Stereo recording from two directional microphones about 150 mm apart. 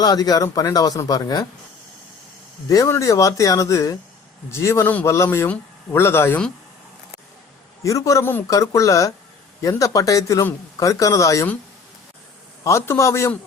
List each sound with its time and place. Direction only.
0.0 s a man's voice: 25° left (ahead or behind)
2.6 s a man's voice: 20° left (ahead or behind)
7.9 s a man's voice: 20° left (ahead or behind)
12.6 s a man's voice: 15° left (ahead or behind)